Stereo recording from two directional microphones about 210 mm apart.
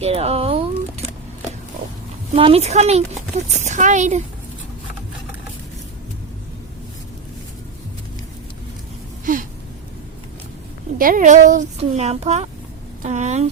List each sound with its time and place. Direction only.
0.0 s a sound: 30° right (ahead or behind)
2.3 s speech: 30° right (ahead or behind)
9.2 s gasp: 40° right (ahead or behind)
10.9 s speech: 40° right (ahead or behind)